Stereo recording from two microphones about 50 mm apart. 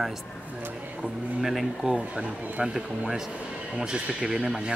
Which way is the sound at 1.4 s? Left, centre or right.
Centre.